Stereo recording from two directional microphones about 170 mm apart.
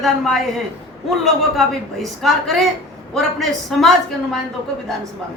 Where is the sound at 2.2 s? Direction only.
Centre (ahead or behind).